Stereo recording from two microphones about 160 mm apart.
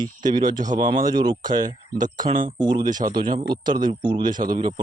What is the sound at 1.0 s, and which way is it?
Speech, 30° right (ahead or behind).